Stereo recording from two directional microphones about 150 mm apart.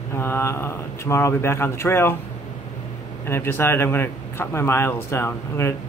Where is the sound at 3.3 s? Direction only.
15° left (ahead or behind).